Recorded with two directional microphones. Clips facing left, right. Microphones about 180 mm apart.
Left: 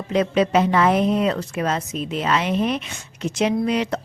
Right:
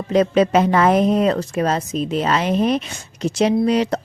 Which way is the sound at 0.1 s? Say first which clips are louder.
Right 3 dB; 40° right (ahead or behind).